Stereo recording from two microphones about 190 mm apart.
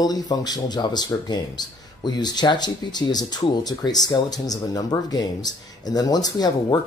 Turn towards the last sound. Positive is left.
turn(degrees=20)  # may be behind; listen again after turning